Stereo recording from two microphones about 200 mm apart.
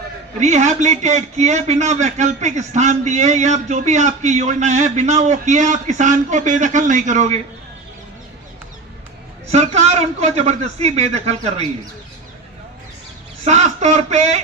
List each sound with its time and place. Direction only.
0.3 s a man's voice: 35° right (ahead or behind)
9.5 s a man's voice: 30° right (ahead or behind)
13.4 s a man's voice: 35° right (ahead or behind)